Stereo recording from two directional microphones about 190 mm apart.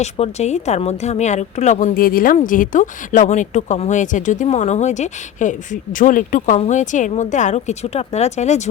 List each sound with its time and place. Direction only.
0.0 s speech: 35° left (ahead or behind)